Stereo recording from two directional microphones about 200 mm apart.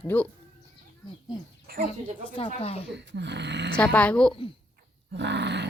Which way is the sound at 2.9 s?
60° right (ahead or behind).